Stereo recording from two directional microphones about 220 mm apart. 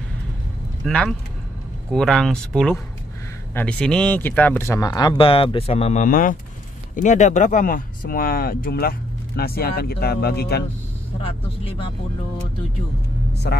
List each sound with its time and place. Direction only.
0.8 s speech: centre (ahead or behind); by 10.6 s 45° left (ahead or behind)
11.1 s speech: 25° left (ahead or behind)
13.4 s speech: 45° left (ahead or behind)